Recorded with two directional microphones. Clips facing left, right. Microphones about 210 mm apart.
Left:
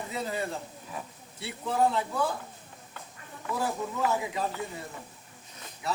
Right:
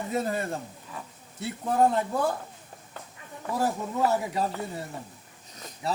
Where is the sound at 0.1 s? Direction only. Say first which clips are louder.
Right 5 dB; 50° right (ahead or behind).